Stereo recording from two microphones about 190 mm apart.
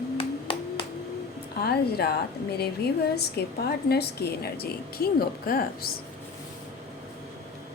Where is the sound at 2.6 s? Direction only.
60° left (ahead or behind).